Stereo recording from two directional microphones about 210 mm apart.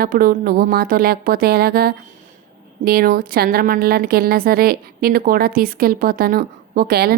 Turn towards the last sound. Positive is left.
turn(degrees=-45)  # may be behind; listen again after turning